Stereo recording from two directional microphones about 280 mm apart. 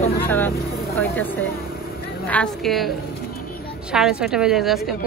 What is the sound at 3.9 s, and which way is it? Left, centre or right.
Speech, centre.